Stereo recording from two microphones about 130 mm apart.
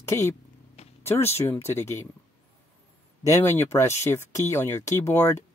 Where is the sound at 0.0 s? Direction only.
20° left (ahead or behind).